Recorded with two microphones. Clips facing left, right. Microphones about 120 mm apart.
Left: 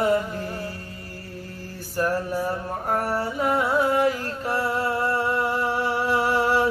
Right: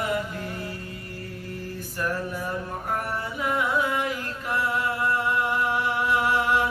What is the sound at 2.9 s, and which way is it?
Music, 35° left (ahead or behind).